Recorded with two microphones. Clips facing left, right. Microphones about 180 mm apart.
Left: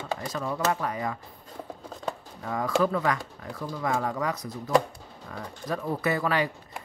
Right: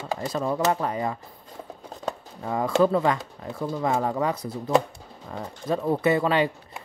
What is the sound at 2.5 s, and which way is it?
Speech, 25° right (ahead or behind).